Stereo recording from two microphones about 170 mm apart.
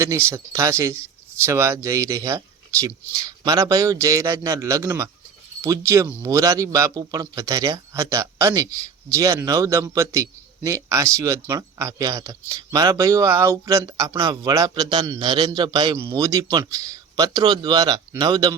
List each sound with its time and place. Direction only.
0.3 s speech: 15° right (ahead or behind)